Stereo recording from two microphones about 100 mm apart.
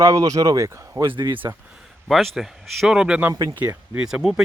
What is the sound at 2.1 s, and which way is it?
Speech, centre (ahead or behind).